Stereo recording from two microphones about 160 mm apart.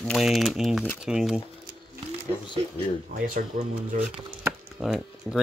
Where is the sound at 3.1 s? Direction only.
55° right (ahead or behind).